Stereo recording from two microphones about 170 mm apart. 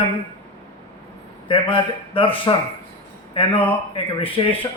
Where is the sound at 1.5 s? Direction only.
30° left (ahead or behind).